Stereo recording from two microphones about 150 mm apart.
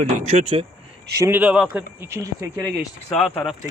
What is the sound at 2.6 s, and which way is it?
Speech, 5° left (ahead or behind).